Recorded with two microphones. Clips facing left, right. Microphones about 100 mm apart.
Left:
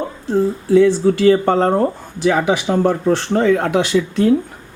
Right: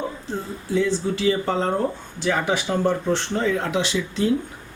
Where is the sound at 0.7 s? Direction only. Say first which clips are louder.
Left 9 dB; 70° left (ahead or behind).